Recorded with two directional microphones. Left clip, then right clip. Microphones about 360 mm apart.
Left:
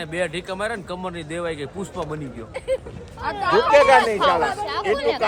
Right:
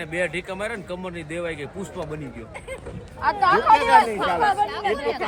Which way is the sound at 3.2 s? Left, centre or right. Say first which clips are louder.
Right 3 dB; centre.